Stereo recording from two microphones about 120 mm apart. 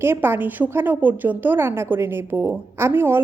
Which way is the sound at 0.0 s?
20° right (ahead or behind).